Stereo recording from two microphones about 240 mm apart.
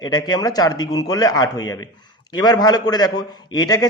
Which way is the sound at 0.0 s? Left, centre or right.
Centre.